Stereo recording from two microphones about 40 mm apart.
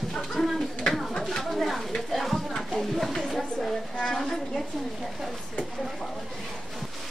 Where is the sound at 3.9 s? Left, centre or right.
Centre.